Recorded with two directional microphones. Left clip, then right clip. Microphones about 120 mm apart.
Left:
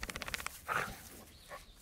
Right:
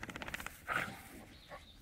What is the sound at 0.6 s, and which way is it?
Dog, 25° left (ahead or behind).